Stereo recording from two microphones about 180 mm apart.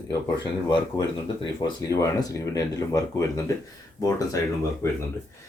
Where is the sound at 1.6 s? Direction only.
20° left (ahead or behind).